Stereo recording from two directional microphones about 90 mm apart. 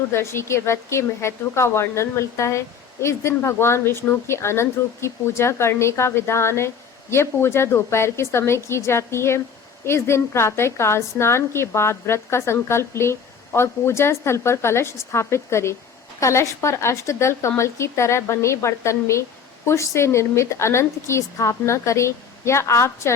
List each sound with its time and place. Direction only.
0.1 s a woman's voice: 30° left (ahead or behind)